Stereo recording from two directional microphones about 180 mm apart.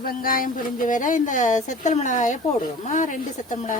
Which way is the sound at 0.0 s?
55° left (ahead or behind).